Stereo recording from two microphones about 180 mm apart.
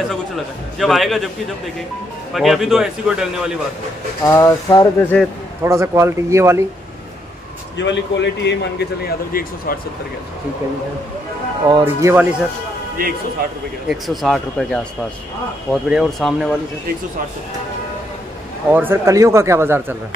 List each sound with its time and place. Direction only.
0.7 s a man's voice: centre (ahead or behind)
2.3 s a man's voice: centre (ahead or behind)
4.2 s a sound: 15° left (ahead or behind)
5.6 s speech: 15° right (ahead or behind)
7.7 s a man's voice: 80° left
9.3 s speech: 55° left (ahead or behind)
11.8 s speech: 15° right (ahead or behind)
13.8 s a man's voice: centre (ahead or behind)
18.7 s speech: 10° right (ahead or behind)